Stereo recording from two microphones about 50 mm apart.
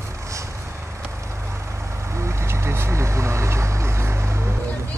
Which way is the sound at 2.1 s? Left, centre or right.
Right.